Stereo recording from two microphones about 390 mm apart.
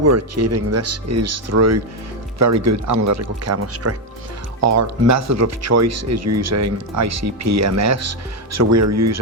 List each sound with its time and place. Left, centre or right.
0.0 s speech: right